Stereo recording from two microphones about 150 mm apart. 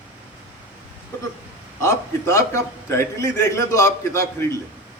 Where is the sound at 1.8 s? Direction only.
20° left (ahead or behind).